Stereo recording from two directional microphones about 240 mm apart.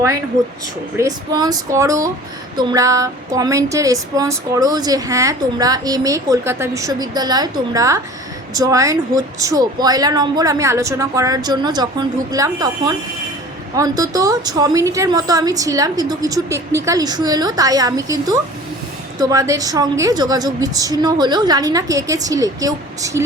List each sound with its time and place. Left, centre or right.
0.9 s a woman's voice: centre